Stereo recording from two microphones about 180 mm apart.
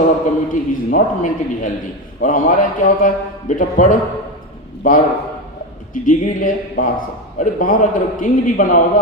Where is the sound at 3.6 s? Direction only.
45° left (ahead or behind).